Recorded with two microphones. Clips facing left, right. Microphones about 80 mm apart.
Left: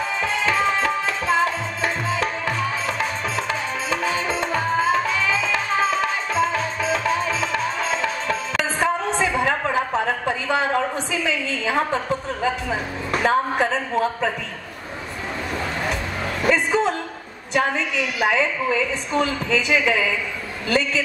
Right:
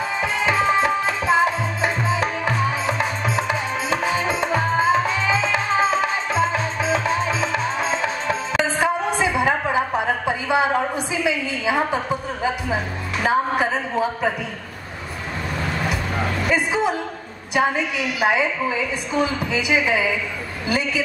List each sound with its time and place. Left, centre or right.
0.2 s tabla: centre
4.6 s music: centre
8.8 s a sound: centre
13.2 s a man's voice: centre
16.5 s a sound: centre
17.6 s a woman's voice: centre